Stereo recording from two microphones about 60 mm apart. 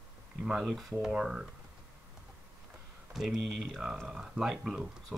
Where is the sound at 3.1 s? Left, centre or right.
Centre.